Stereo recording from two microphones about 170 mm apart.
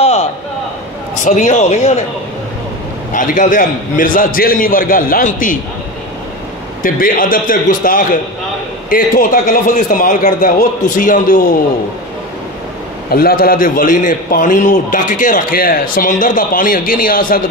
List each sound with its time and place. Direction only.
0.0 s a sound: 40° left (ahead or behind)
1.2 s a man's voice: 45° left (ahead or behind)
3.1 s a man's voice: 50° left (ahead or behind)
6.8 s a man's voice: 55° left (ahead or behind)
13.1 s a man's voice: 60° left (ahead or behind)